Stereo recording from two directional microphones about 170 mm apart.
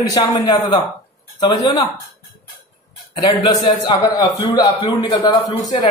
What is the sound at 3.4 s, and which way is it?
Speech, 25° left (ahead or behind).